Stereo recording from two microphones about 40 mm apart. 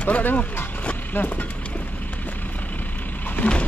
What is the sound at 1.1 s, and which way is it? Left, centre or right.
Speech, left.